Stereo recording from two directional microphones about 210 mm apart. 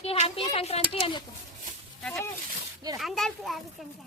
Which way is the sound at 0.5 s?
30° left (ahead or behind).